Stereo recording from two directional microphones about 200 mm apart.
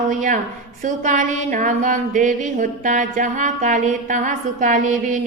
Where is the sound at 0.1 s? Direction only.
40° right (ahead or behind).